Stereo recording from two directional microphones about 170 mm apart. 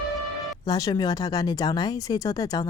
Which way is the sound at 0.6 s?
20° left (ahead or behind).